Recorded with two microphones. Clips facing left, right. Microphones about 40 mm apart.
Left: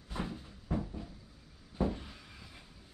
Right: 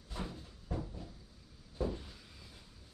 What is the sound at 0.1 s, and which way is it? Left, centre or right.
Cupboard open or close, left.